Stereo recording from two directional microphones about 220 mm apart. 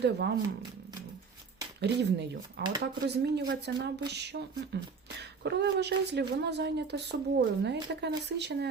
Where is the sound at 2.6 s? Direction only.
50° right (ahead or behind).